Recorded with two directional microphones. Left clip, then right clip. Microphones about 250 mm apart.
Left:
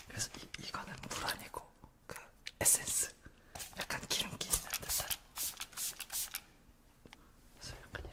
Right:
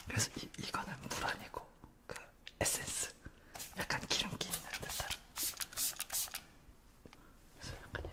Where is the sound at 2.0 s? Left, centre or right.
Centre.